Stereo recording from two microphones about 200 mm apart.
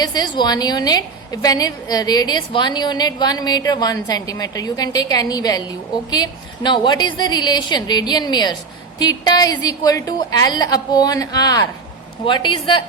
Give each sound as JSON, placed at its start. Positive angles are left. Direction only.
{"t": 0.0, "sound": "a woman's voice", "side_deg": 20}